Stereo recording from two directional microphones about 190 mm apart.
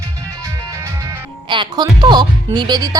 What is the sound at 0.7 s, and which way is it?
Music, 15° right (ahead or behind).